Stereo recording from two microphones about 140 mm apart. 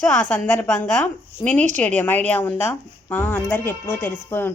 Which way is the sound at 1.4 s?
30° left (ahead or behind).